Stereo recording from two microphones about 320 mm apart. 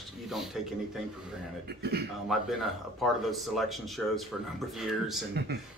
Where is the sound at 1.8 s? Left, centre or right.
Right.